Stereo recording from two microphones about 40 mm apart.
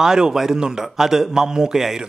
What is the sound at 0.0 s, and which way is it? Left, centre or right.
A man's voice, centre.